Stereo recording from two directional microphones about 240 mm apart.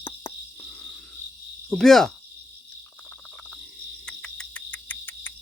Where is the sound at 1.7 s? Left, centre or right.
Centre.